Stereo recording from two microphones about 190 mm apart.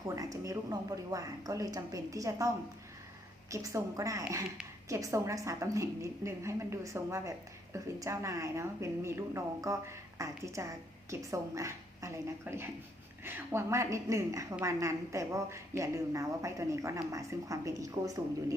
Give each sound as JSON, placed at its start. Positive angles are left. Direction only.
{"t": 0.2, "sound": "a woman's voice", "side_deg": -20}
{"t": 3.5, "sound": "a woman's voice", "side_deg": -15}